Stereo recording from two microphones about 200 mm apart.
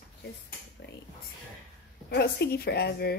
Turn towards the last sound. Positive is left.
turn(degrees=50)  # may be behind; listen again after turning